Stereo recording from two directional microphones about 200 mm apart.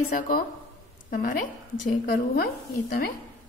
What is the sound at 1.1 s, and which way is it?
A woman's voice, 45° left (ahead or behind).